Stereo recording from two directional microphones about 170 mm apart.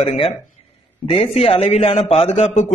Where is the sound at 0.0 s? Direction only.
40° left (ahead or behind).